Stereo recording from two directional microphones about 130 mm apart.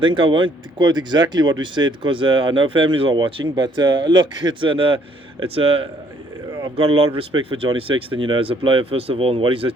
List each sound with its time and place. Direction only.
0.0 s speech: 40° right (ahead or behind)